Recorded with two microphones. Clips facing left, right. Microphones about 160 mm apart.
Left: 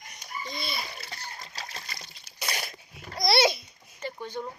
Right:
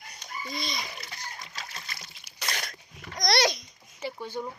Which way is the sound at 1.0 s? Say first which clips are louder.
Even; 35° left (ahead or behind).